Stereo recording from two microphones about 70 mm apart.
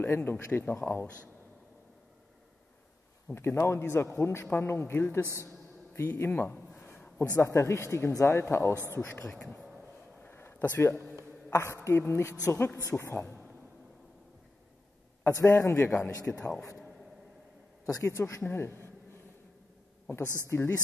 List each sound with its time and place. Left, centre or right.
0.0 s speech: left
3.3 s a man's voice: left
6.5 s a sound: left
7.3 s a man's voice: left
9.2 s speech: centre
10.2 s a sound: left
11.5 s a man's voice: left
15.2 s a man's voice: left
16.3 s speech: centre
17.8 s a man's voice: left
18.4 s a man's voice: left
20.4 s a man's voice: left